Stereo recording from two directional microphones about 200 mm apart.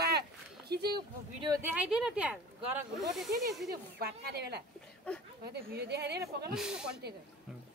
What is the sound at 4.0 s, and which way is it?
A woman's voice, 50° right (ahead or behind).